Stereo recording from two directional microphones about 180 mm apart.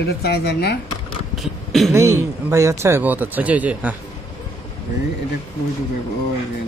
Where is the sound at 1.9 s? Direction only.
15° right (ahead or behind).